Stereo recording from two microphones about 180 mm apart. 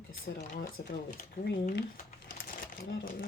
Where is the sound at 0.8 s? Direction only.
55° left (ahead or behind).